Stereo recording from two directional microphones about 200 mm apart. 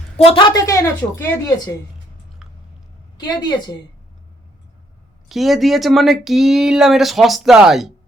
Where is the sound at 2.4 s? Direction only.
5° right (ahead or behind).